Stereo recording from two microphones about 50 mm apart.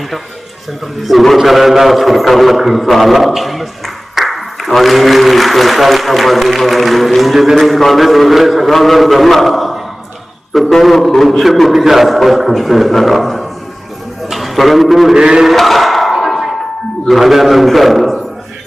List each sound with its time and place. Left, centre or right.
1.0 s a man's voice: centre
15.1 s chant: centre
15.4 s battle cry: centre
17.1 s a man's voice: centre